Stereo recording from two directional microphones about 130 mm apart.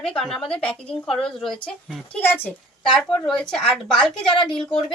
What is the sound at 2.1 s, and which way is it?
Speech, 15° left (ahead or behind).